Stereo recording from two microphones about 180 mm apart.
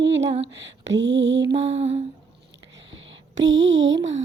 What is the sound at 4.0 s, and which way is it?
Speech, 40° right (ahead or behind).